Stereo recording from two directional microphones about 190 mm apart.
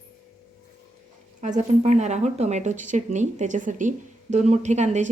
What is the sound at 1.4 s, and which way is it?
A woman's voice, 40° right (ahead or behind).